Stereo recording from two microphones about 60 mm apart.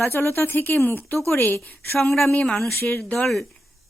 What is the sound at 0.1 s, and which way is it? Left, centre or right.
A woman's voice, left.